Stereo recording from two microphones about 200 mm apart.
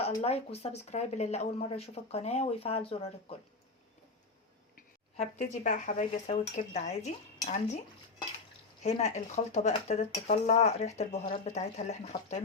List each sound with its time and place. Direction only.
0.2 s speech: 30° left (ahead or behind)
5.1 s speech: 35° left (ahead or behind)
8.8 s speech: 35° left (ahead or behind)